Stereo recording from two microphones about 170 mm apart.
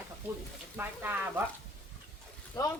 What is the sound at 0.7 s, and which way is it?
Speech, 10° right (ahead or behind).